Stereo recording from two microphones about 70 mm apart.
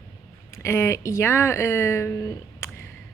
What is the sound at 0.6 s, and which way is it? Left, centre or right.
A woman's voice, left.